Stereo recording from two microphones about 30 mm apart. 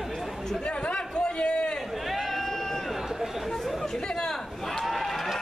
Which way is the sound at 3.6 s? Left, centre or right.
Centre.